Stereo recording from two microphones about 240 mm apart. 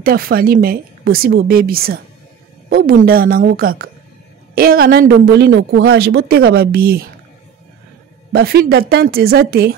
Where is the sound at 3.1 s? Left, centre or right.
Right.